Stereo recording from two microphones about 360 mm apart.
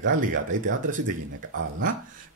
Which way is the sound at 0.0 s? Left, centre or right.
Right.